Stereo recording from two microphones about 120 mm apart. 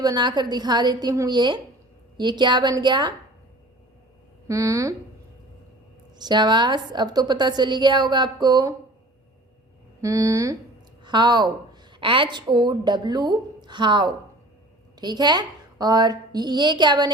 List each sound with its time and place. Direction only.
0.0 s a woman's voice: 35° right (ahead or behind)
4.4 s speech: 25° right (ahead or behind)
6.1 s a woman's voice: 35° right (ahead or behind)
10.0 s speech: 25° right (ahead or behind)
11.0 s a woman's voice: 40° right (ahead or behind)